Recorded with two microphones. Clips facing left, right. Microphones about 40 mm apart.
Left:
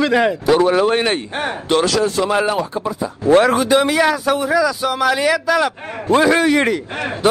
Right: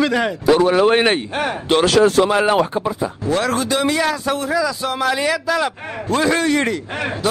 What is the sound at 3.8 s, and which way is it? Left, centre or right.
A man's voice, centre.